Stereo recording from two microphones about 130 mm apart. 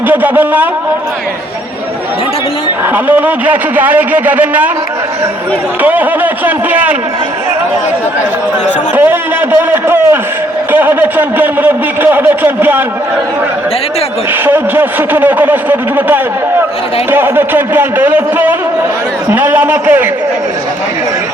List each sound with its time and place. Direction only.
0.1 s a man's voice: 15° right (ahead or behind)
2.9 s a man's voice: 15° right (ahead or behind)
5.8 s a man's voice: 15° right (ahead or behind)
9.0 s a man's voice: 15° right (ahead or behind)
14.4 s a man's voice: 15° right (ahead or behind)